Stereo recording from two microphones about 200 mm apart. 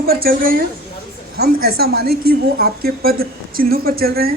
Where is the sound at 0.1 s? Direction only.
50° right (ahead or behind).